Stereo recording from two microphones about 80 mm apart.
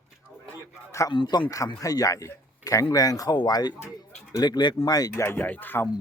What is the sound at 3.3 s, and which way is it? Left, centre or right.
Speech, left.